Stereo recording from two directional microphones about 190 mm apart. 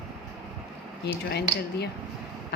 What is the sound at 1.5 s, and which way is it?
Speech, 20° right (ahead or behind).